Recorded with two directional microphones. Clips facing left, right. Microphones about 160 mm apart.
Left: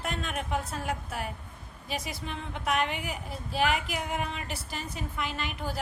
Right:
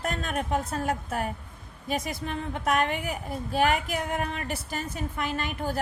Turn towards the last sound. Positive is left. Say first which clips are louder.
# right 4 dB
turn(degrees=-50)  # may be behind; listen again after turning